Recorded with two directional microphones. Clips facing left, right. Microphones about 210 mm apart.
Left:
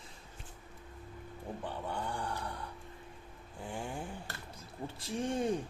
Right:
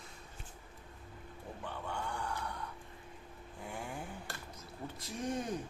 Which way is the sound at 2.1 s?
30° left (ahead or behind).